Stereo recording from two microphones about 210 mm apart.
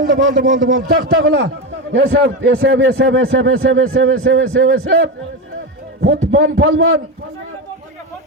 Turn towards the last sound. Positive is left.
turn(degrees=-70)  # may be behind; listen again after turning